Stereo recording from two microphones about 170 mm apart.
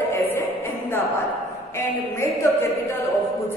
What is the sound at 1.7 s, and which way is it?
Speech, 15° left (ahead or behind).